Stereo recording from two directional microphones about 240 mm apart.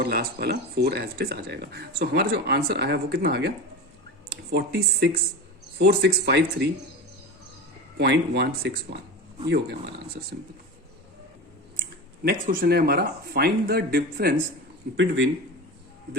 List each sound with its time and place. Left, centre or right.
0.0 s speech: right
7.9 s speech: right
11.8 s speech: right